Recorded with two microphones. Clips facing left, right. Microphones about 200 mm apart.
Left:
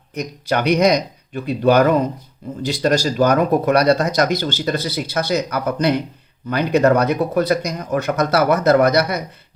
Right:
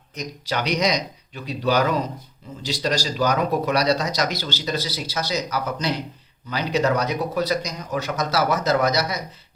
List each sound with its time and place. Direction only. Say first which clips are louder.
0.1 s speech: left 7 dB; 55° left (ahead or behind)